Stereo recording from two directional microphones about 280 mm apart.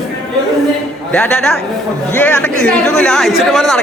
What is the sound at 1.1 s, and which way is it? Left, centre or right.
Speech, centre.